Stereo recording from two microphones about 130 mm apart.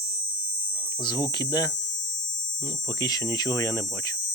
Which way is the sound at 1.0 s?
35° left (ahead or behind).